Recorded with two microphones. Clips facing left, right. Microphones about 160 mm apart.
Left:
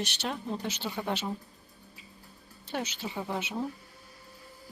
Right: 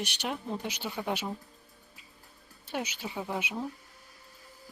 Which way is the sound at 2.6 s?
10° right (ahead or behind).